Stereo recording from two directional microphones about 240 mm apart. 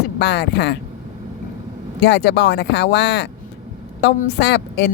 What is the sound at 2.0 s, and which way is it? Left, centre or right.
Speech, left.